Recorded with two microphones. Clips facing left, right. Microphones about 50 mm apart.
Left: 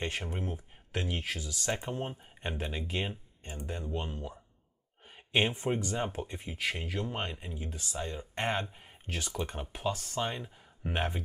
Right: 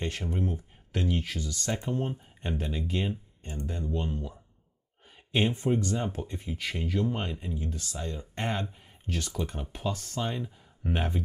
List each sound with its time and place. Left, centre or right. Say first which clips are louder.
0.0 s speech: right 4 dB; centre
1.7 s speech: right 3 dB; centre
9.2 s speech: left 1 dB; centre